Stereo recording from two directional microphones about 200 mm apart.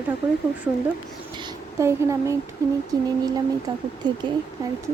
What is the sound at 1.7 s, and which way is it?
Speech, 15° right (ahead or behind).